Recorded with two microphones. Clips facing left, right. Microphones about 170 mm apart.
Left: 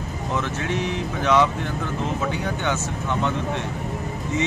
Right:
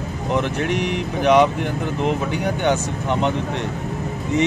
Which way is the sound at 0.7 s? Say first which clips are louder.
Right 3 dB; 70° right (ahead or behind).